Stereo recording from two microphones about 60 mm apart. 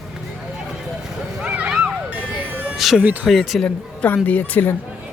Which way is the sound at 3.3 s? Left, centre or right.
Centre.